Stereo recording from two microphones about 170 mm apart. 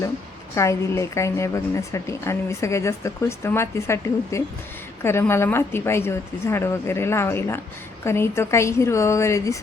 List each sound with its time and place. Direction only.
0.5 s a woman's voice: 15° left (ahead or behind)